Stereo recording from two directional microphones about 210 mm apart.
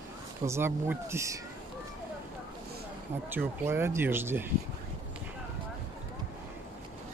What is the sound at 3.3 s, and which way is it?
Speech, 10° right (ahead or behind).